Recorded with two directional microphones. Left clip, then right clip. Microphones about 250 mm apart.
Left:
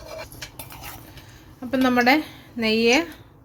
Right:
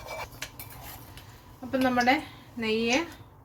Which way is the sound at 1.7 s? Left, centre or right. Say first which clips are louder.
Left 6 dB; left.